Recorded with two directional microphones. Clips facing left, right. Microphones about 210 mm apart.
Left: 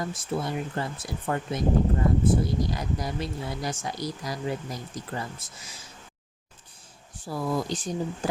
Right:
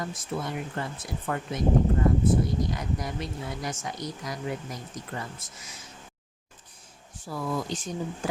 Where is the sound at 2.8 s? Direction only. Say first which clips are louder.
Left 2 dB; 35° left (ahead or behind).